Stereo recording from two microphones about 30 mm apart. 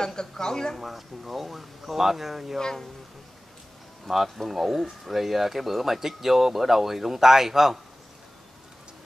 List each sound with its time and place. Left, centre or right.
0.0 s speech: left
0.7 s speech: centre
4.1 s speech: centre
4.5 s speech: centre